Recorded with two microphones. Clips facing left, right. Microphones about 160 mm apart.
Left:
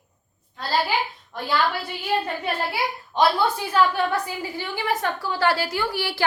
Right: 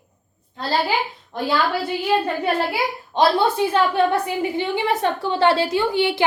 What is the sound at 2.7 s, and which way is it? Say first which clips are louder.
A woman's voice: right 3 dB; 25° right (ahead or behind).